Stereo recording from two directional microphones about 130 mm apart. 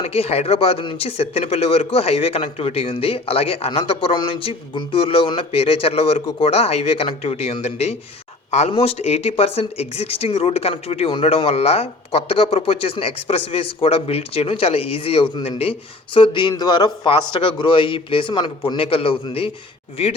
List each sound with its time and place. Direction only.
0.0 s a man's voice: 50° left (ahead or behind)